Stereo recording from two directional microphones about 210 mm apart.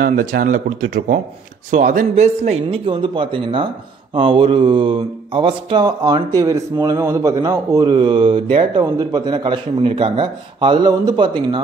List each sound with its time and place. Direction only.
0.0 s speech: 40° right (ahead or behind); by 11.6 s 25° right (ahead or behind)